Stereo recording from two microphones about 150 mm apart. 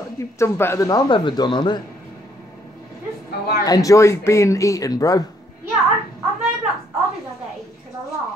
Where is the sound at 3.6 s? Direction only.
25° left (ahead or behind).